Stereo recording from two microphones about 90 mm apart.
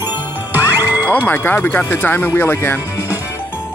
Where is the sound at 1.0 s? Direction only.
20° left (ahead or behind).